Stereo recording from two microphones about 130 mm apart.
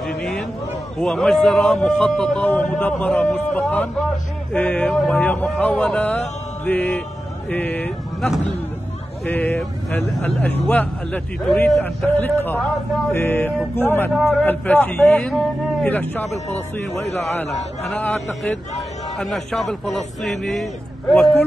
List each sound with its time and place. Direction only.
0.0 s a sound: 5° left (ahead or behind)
0.9 s a man's voice: 5° left (ahead or behind)
9.3 s a man's voice: 15° left (ahead or behind)
9.6 s a man's voice: 5° left (ahead or behind)
12.2 s a man's voice: 15° left (ahead or behind)
17.9 s a man's voice: 10° left (ahead or behind)